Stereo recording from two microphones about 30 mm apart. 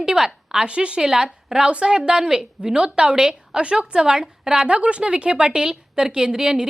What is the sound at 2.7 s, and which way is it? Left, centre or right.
A woman's voice, right.